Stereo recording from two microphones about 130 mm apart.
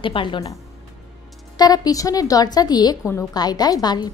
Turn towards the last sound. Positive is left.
turn(degrees=30)  # may be behind; listen again after turning